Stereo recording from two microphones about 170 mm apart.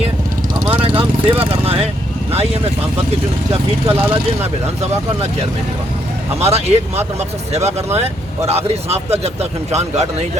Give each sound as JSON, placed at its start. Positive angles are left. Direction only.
{"t": 0.7, "sound": "vehicle", "side_deg": -30}
{"t": 3.5, "sound": "speech", "side_deg": -30}
{"t": 6.4, "sound": "speech", "side_deg": -40}